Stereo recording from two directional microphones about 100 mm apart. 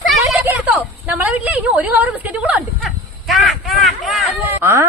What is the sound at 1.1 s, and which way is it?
A woman's voice, 15° right (ahead or behind).